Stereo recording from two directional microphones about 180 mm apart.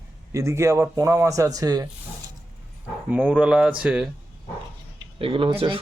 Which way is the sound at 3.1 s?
5° right (ahead or behind).